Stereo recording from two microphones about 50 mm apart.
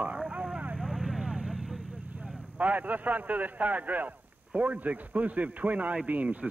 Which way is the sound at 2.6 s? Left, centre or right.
Right.